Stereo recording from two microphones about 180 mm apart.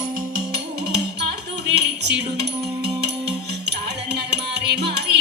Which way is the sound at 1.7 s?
70° right (ahead or behind).